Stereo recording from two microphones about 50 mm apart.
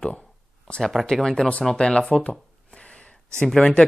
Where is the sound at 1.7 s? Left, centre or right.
Centre.